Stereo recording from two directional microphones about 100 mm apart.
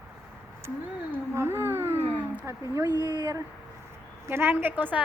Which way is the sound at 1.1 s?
25° right (ahead or behind).